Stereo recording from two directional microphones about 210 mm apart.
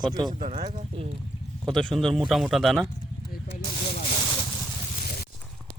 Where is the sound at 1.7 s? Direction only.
Centre (ahead or behind).